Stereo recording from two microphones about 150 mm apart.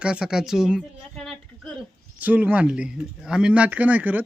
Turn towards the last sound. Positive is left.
turn(degrees=-10)  # may be behind; listen again after turning